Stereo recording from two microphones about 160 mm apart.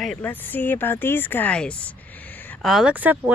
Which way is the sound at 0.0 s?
5° left (ahead or behind).